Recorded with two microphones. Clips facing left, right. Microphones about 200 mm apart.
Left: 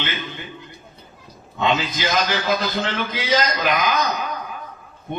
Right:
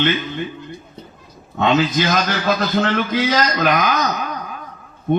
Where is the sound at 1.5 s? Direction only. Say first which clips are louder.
Right 6 dB; 55° right (ahead or behind).